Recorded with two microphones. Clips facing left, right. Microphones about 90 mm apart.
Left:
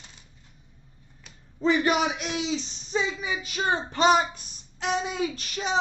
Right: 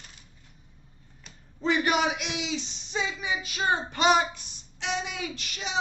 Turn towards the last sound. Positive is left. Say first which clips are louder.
# left 6 dB
turn(degrees=40)  # may be behind; listen again after turning